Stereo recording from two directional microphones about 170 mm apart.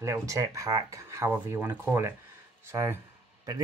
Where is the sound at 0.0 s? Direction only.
20° right (ahead or behind).